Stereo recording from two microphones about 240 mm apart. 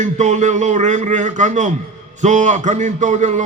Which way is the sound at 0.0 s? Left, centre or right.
Right.